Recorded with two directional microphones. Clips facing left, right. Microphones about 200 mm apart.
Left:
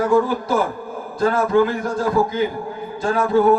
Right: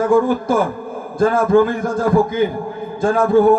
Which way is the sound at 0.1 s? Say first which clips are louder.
Right 3 dB; 50° right (ahead or behind).